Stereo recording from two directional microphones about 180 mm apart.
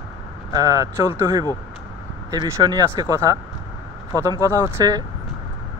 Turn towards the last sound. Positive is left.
turn(degrees=-20)  # may be behind; listen again after turning